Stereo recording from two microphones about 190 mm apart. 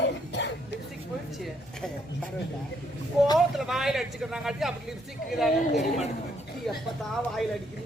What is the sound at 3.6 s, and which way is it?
A man's voice, centre (ahead or behind).